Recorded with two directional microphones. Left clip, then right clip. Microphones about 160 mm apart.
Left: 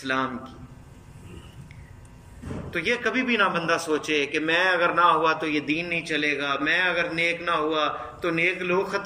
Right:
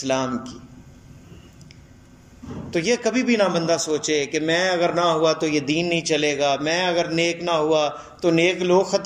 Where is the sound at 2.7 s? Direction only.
40° right (ahead or behind).